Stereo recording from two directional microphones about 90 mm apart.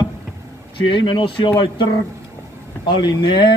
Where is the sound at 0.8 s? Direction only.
65° left (ahead or behind).